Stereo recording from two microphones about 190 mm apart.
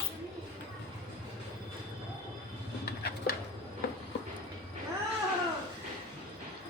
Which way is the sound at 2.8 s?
55° left (ahead or behind).